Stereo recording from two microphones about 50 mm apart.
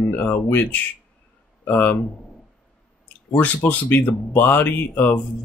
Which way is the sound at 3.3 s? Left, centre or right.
Left.